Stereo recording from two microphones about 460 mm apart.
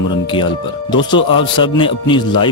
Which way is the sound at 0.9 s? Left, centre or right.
Centre.